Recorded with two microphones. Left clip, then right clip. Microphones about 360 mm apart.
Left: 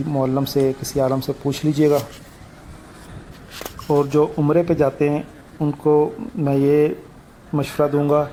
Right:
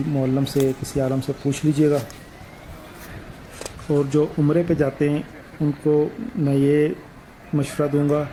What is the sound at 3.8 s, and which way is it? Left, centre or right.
Speech, left.